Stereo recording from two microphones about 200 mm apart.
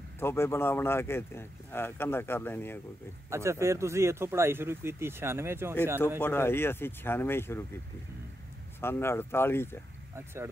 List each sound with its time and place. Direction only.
0.2 s speech: 10° left (ahead or behind)
3.3 s speech: 15° right (ahead or behind)
6.2 s speech: 10° left (ahead or behind)
8.8 s speech: 10° left (ahead or behind)
10.1 s speech: 10° right (ahead or behind)